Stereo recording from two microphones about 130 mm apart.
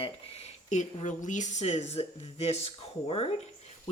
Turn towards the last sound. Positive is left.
turn(degrees=50)  # may be behind; listen again after turning